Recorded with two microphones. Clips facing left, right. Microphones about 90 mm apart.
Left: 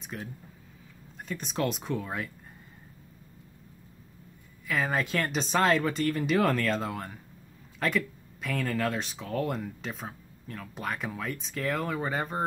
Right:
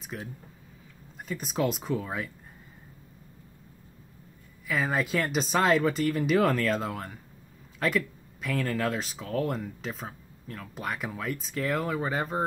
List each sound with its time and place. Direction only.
0.0 s speech: centre (ahead or behind)
4.6 s speech: centre (ahead or behind)